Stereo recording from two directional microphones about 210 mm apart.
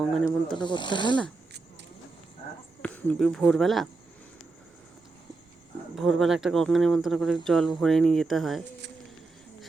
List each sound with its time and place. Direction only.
0.0 s speech: centre (ahead or behind)
0.5 s speech: 20° left (ahead or behind)
2.8 s speech: 5° left (ahead or behind)
6.0 s speech: centre (ahead or behind)